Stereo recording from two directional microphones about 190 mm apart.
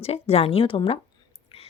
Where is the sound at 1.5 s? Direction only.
30° left (ahead or behind).